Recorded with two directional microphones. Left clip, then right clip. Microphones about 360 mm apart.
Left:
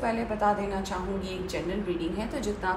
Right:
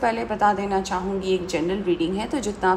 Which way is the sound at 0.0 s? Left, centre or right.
Centre.